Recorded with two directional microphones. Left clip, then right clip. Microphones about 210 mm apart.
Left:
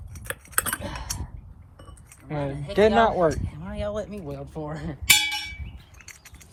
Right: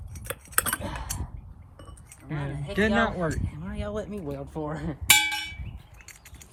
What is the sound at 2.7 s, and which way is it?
Speech, 15° left (ahead or behind).